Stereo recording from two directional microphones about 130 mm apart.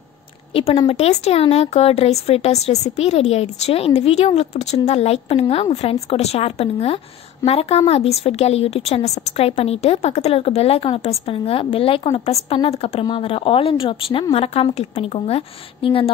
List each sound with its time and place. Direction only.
0.5 s a woman's voice: 45° left (ahead or behind)
13.0 s speech: 40° left (ahead or behind)